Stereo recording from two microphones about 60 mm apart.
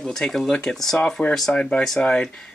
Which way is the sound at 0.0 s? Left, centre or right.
Centre.